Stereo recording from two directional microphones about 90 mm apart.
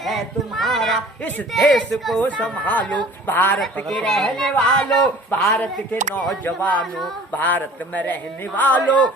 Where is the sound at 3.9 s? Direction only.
5° left (ahead or behind).